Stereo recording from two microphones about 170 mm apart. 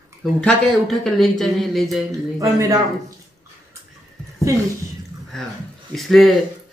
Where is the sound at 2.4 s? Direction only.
20° right (ahead or behind).